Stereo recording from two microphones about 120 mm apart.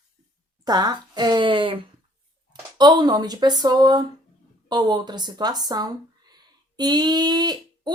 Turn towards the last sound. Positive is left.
turn(degrees=-35)  # may be behind; listen again after turning